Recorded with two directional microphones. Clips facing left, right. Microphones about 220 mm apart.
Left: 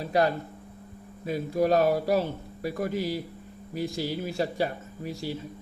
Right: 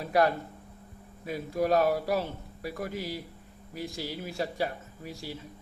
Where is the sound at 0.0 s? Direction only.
25° left (ahead or behind).